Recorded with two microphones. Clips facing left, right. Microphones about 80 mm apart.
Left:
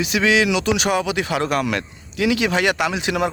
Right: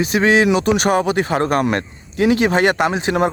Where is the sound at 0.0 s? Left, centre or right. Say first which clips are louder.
Right 4 dB; right.